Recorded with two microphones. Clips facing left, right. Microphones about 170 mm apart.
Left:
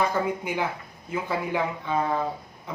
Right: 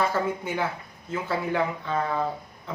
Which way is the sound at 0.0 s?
15° left (ahead or behind).